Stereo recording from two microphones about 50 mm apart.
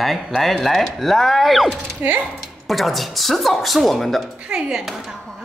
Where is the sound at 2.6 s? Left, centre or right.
Centre.